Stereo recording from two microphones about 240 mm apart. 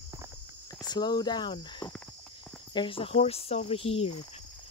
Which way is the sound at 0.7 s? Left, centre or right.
Centre.